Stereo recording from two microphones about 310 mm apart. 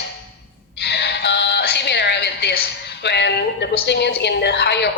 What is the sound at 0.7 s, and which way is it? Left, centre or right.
Music, left.